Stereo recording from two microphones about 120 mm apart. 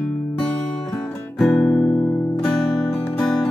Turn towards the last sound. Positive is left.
turn(degrees=5)  # may be behind; listen again after turning